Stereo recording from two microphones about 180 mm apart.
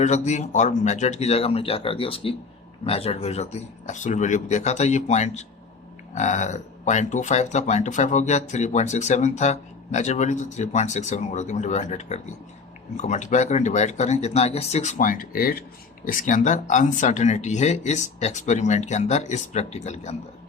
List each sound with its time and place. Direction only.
0.0 s speech: 40° left (ahead or behind)